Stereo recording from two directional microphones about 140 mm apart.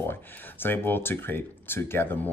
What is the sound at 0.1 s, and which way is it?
Speech, 15° left (ahead or behind).